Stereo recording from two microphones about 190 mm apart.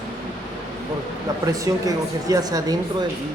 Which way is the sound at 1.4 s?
20° right (ahead or behind).